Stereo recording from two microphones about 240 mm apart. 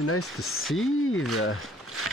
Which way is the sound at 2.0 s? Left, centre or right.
Right.